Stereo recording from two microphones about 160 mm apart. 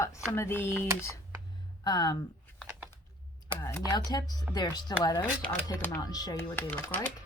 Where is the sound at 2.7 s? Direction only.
10° right (ahead or behind).